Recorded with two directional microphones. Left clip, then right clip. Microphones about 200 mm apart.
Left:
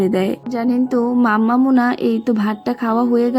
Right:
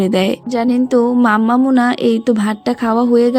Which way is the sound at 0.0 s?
35° right (ahead or behind).